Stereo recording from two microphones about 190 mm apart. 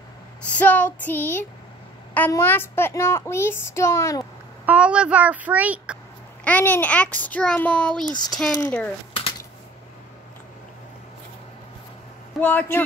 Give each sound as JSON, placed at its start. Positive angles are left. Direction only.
{"t": 0.5, "sound": "speech", "side_deg": 10}
{"t": 4.6, "sound": "a child's voice", "side_deg": -5}
{"t": 6.4, "sound": "speech", "side_deg": 10}
{"t": 8.1, "sound": "speech", "side_deg": 20}
{"t": 8.4, "sound": "speech", "side_deg": 10}
{"t": 12.4, "sound": "speech", "side_deg": 10}